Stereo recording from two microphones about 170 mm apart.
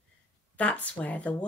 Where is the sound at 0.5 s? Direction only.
10° left (ahead or behind).